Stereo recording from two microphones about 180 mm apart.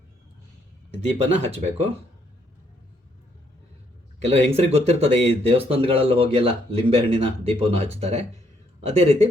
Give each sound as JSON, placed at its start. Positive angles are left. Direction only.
{"t": 1.2, "sound": "speech", "side_deg": -35}
{"t": 4.2, "sound": "speech", "side_deg": -35}